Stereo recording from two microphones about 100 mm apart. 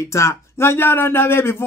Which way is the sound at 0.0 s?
30° left (ahead or behind).